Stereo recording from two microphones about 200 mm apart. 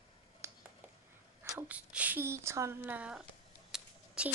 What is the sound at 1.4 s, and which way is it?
Speech, 10° right (ahead or behind).